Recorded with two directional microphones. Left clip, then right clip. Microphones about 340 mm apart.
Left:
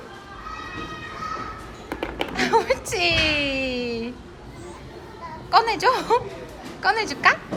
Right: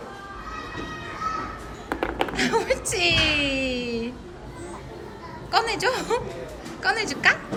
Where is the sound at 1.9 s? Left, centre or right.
Centre.